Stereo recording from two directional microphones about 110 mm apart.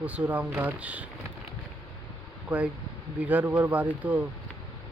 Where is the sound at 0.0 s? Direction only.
15° right (ahead or behind).